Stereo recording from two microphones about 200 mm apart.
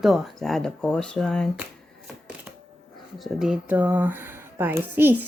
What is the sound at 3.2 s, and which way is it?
Speech, centre (ahead or behind).